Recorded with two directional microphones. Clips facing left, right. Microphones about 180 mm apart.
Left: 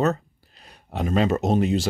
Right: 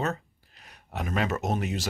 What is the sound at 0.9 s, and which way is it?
Speech, 30° left (ahead or behind).